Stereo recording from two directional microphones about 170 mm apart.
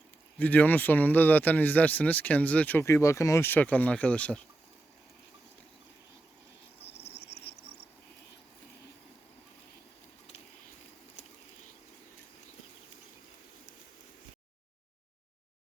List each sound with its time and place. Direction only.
0.3 s speech: 10° left (ahead or behind)
7.0 s cricket: 75° left (ahead or behind)